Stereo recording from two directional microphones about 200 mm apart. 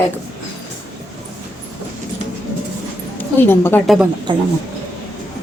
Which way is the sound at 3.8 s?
Centre (ahead or behind).